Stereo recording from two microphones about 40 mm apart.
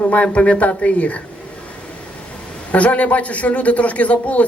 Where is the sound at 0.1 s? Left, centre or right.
Left.